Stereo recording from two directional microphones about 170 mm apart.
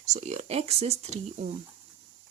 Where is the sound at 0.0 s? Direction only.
40° right (ahead or behind).